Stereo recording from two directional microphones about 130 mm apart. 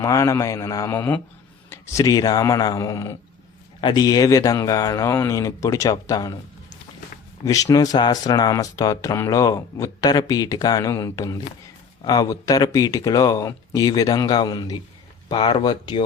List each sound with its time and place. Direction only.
0.0 s speech: 25° left (ahead or behind)
7.4 s speech: 25° left (ahead or behind)